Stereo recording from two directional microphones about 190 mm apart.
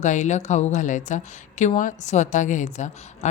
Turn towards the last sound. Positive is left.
turn(degrees=40)  # may be behind; listen again after turning